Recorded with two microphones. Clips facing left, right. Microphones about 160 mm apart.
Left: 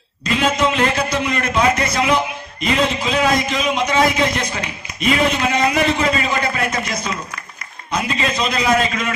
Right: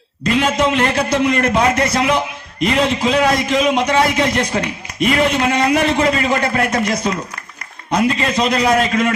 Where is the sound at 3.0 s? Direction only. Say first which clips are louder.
Right 3 dB; 60° right (ahead or behind).